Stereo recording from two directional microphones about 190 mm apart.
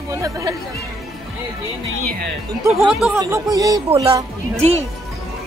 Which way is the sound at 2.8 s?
5° right (ahead or behind).